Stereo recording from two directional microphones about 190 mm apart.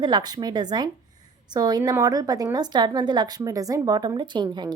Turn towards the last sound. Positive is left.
turn(degrees=-20)  # may be behind; listen again after turning